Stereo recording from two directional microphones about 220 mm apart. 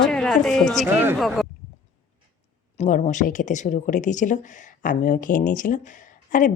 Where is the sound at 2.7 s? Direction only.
30° left (ahead or behind).